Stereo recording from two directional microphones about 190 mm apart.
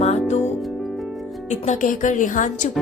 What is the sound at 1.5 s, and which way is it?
A woman's voice, 40° left (ahead or behind).